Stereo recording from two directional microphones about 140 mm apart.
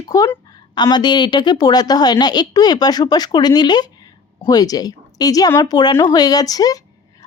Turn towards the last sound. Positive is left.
turn(degrees=25)  # may be behind; listen again after turning